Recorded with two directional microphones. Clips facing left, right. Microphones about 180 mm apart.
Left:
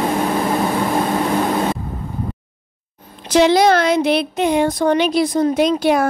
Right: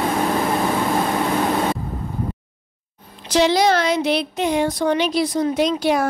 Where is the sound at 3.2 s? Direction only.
55° left (ahead or behind).